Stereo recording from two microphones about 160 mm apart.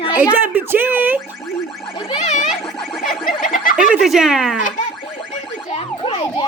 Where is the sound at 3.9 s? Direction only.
5° right (ahead or behind).